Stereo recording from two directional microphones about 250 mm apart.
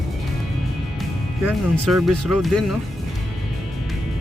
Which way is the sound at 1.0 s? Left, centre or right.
Centre.